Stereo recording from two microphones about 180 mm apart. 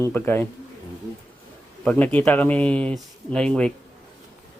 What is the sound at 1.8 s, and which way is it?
Speech, 10° left (ahead or behind).